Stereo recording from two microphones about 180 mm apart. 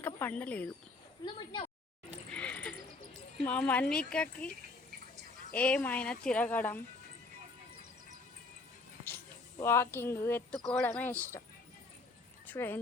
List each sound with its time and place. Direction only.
0.0 s speech: 10° left (ahead or behind)
1.2 s speech: 25° left (ahead or behind)
2.3 s a sound: 10° left (ahead or behind)
3.4 s speech: 10° left (ahead or behind)
5.5 s speech: 5° left (ahead or behind)
9.0 s speech: 10° left (ahead or behind)
12.5 s speech: 10° left (ahead or behind)